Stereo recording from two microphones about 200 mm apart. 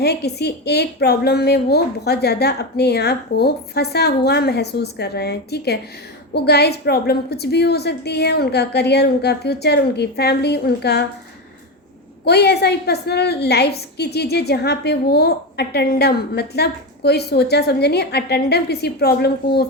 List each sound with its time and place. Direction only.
0.0 s a woman's voice: 55° left (ahead or behind)
12.2 s a woman's voice: 55° left (ahead or behind)